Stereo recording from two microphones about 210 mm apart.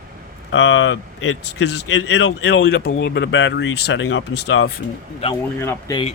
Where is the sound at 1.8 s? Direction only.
65° left (ahead or behind).